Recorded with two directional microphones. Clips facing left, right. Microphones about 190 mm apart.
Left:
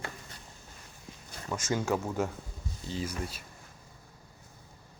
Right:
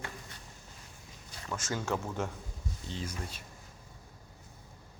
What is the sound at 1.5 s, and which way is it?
Speech, 15° left (ahead or behind).